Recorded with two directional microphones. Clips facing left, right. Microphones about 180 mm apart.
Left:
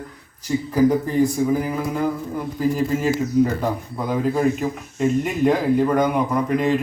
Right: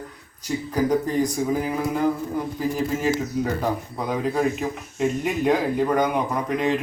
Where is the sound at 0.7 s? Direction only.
15° right (ahead or behind).